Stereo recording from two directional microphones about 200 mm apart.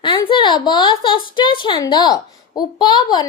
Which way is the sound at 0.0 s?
25° left (ahead or behind).